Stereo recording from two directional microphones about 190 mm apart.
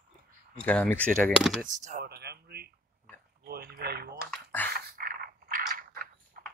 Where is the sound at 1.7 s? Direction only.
40° right (ahead or behind).